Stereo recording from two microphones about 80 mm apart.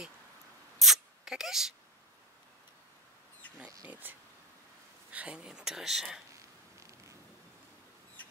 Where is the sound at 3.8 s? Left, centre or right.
Right; by 6.2 s centre.